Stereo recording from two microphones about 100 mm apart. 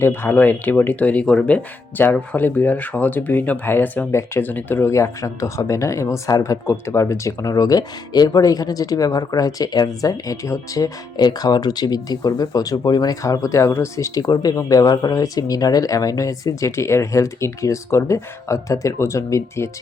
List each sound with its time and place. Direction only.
0.0 s speech: 20° left (ahead or behind)